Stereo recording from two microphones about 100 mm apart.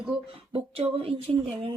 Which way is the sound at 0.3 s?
70° right (ahead or behind).